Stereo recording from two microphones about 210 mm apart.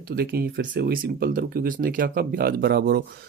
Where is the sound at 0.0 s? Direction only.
45° right (ahead or behind).